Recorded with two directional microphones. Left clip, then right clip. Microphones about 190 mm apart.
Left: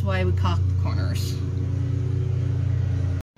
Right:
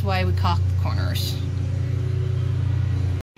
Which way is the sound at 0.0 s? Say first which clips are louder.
Right 2 dB; 5° right (ahead or behind).